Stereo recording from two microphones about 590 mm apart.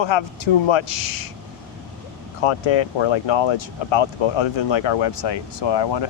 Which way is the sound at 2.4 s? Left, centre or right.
Left.